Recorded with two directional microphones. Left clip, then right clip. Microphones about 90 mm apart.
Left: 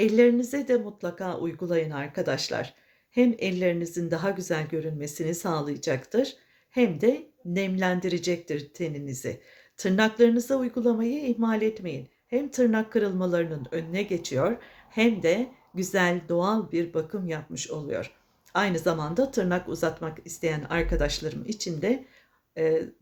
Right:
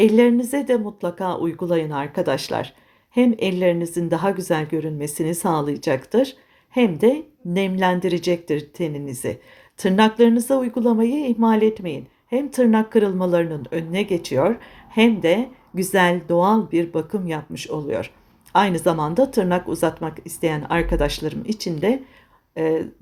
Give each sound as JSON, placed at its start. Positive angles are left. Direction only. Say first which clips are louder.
{"t": 0.0, "sound": "speech", "louder": "right 5 dB", "side_deg": -35}